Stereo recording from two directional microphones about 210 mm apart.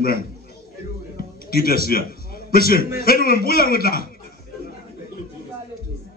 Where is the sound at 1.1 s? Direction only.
45° left (ahead or behind).